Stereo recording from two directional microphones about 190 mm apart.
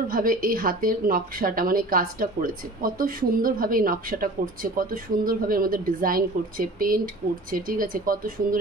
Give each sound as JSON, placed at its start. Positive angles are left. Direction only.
{"t": 0.1, "sound": "a woman's voice", "side_deg": -50}